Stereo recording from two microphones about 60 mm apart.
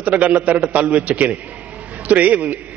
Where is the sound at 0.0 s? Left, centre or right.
Right.